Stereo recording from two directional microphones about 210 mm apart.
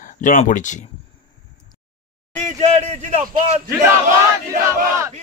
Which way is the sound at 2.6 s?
35° right (ahead or behind).